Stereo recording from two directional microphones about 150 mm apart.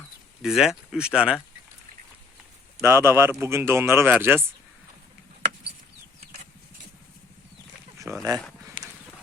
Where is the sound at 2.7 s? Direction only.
20° right (ahead or behind).